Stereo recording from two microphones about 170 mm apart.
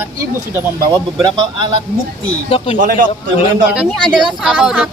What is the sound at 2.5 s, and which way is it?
Speech, 35° left (ahead or behind).